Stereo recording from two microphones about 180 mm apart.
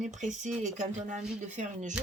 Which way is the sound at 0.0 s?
40° right (ahead or behind).